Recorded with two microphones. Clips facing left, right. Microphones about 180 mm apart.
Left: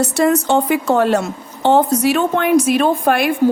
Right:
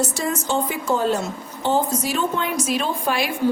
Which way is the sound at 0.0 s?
65° left (ahead or behind).